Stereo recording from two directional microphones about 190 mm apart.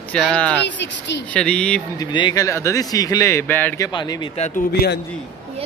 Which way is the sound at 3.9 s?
20° left (ahead or behind).